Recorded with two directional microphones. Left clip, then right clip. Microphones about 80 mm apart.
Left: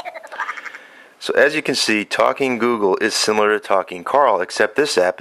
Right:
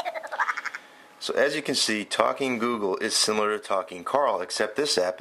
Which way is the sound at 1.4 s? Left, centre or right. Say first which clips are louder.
Left 8 dB; left.